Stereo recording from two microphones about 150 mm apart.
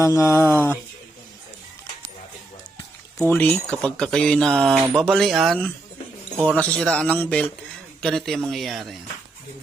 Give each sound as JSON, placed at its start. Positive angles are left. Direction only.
{"t": 0.0, "sound": "a man's voice", "side_deg": 20}
{"t": 3.2, "sound": "speech", "side_deg": 10}
{"t": 6.6, "sound": "a man's voice", "side_deg": 5}